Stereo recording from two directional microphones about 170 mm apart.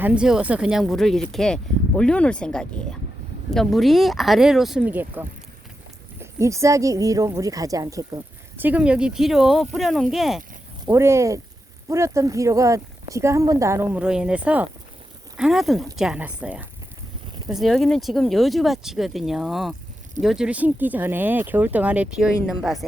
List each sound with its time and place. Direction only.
0.0 s speech: 5° right (ahead or behind)
10.8 s speech: 15° right (ahead or behind); by 22.8 s centre (ahead or behind)